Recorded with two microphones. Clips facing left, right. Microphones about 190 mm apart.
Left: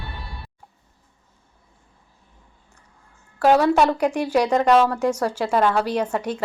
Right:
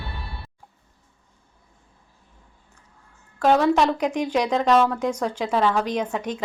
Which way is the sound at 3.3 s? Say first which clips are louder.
Left 2 dB; 10° left (ahead or behind).